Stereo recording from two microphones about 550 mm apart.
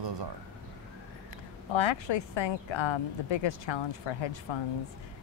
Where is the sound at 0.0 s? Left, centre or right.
Right.